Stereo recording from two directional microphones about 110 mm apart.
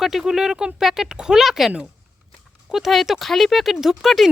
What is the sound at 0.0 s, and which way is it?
Speech, 5° right (ahead or behind).